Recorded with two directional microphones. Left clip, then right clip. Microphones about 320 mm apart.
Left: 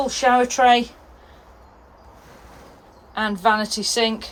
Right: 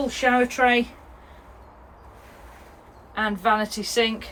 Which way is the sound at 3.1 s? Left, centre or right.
Centre.